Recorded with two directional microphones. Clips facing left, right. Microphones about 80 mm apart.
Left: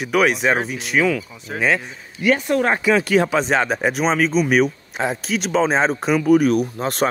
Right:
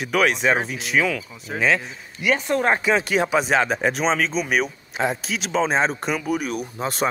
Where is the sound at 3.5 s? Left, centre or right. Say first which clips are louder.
Left 1 dB; centre.